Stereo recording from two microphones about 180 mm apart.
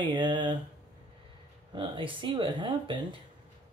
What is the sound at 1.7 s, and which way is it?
Speech, 25° right (ahead or behind).